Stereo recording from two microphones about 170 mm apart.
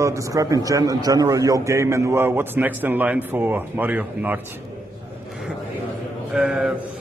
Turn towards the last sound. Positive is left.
turn(degrees=-5)  # may be behind; listen again after turning